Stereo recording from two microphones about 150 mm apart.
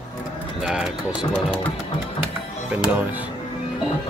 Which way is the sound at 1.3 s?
10° left (ahead or behind).